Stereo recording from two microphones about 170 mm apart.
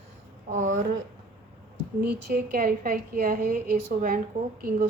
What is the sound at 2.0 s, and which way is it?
Speech, 70° right (ahead or behind).